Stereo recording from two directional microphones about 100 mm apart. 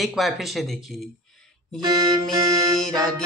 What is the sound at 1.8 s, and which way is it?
Music, 45° right (ahead or behind).